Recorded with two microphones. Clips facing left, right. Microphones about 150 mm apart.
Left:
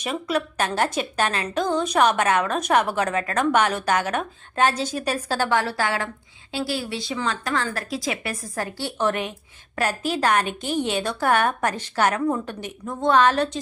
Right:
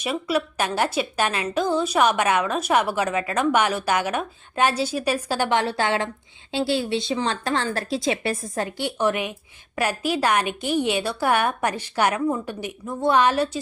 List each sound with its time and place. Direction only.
0.0 s a woman's voice: 10° right (ahead or behind)